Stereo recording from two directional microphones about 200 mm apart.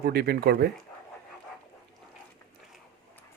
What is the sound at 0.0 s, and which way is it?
Speech, 50° right (ahead or behind).